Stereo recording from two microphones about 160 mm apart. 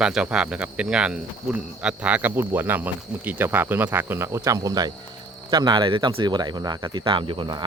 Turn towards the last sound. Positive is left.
turn(degrees=-30)  # may be behind; listen again after turning